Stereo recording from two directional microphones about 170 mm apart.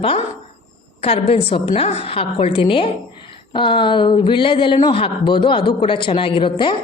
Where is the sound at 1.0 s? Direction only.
35° left (ahead or behind).